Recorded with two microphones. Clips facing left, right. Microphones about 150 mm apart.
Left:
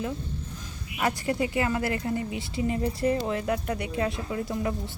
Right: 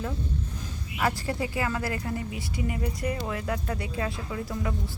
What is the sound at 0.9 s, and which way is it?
Speech, 20° left (ahead or behind).